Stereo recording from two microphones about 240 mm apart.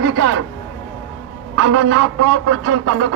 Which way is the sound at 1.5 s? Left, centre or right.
Right.